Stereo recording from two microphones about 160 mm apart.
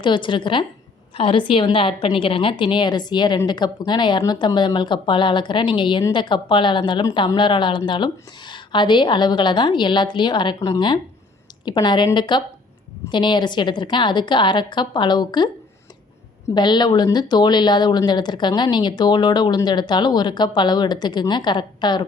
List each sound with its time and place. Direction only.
0.0 s a woman's voice: 30° left (ahead or behind)
16.6 s speech: 30° left (ahead or behind)